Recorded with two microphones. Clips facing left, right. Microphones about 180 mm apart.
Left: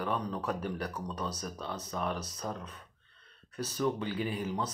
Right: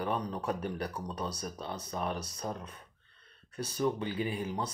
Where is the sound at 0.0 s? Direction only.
20° right (ahead or behind).